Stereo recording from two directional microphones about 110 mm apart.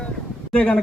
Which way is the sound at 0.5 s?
10° left (ahead or behind).